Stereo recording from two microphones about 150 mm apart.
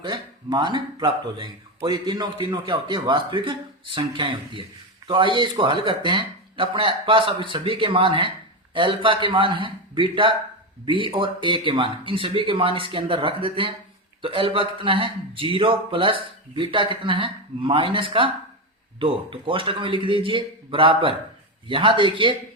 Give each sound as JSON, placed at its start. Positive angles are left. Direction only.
{"t": 0.0, "sound": "speech", "side_deg": -30}